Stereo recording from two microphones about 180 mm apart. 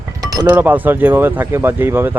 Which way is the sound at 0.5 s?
10° right (ahead or behind).